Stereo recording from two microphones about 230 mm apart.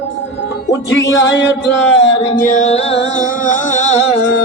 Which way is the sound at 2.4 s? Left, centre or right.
Left.